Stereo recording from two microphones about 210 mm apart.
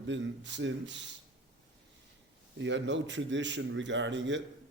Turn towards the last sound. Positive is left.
turn(degrees=-60)  # may be behind; listen again after turning